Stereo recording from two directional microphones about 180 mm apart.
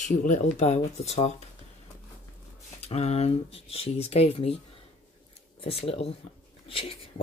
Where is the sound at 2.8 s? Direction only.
35° left (ahead or behind).